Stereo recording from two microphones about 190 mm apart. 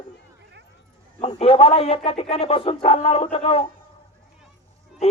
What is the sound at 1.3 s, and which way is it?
Speech, 30° left (ahead or behind).